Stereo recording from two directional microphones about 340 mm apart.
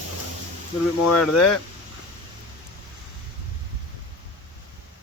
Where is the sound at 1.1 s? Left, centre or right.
Left.